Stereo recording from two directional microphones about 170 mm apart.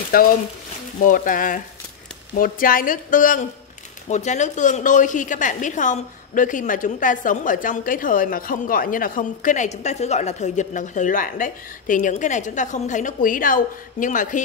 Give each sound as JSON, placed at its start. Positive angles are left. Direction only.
{"t": 0.1, "sound": "a woman's voice", "side_deg": 60}